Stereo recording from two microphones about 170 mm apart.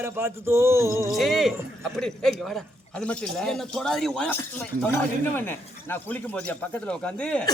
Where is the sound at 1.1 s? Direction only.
Centre (ahead or behind).